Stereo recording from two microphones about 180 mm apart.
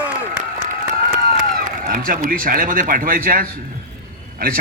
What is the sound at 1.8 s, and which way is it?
A man's voice, 55° right (ahead or behind).